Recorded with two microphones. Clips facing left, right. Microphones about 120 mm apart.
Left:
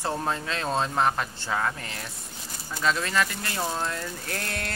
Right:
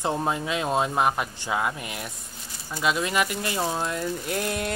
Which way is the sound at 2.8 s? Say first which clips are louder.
Right 1 dB; 15° right (ahead or behind).